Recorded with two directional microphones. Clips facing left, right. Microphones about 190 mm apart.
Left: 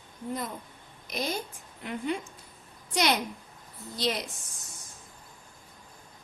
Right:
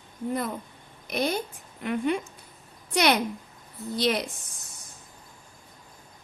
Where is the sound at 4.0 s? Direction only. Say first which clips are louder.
Right 5 dB; 60° right (ahead or behind).